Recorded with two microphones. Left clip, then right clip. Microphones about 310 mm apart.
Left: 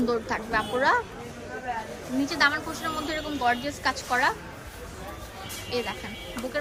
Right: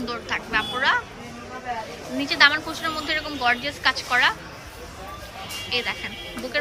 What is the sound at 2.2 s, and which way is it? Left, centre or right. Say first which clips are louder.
A woman's voice: right 6 dB; centre.